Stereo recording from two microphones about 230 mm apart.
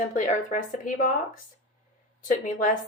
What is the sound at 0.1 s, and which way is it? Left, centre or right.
A woman's voice, left.